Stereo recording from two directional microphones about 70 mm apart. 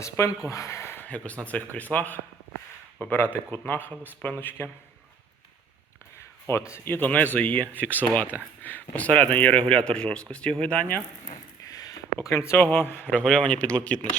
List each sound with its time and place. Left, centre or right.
0.0 s speech: left
0.9 s a man's voice: left
6.7 s a man's voice: left; by 10.8 s centre
11.6 s a sound: left
12.5 s a man's voice: left
13.2 s speech: centre